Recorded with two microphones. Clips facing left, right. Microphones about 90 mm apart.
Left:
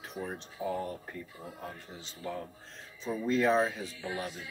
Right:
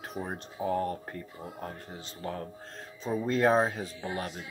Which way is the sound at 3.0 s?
45° right (ahead or behind).